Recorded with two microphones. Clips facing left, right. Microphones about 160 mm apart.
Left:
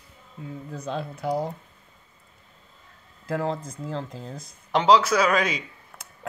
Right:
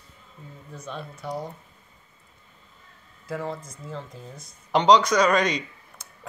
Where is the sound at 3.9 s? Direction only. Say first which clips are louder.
Left 4 dB; 90° left.